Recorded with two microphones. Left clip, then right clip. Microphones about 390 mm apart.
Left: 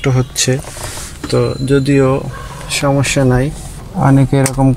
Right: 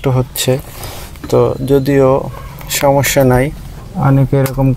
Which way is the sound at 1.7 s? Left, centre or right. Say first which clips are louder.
Right 1 dB; centre.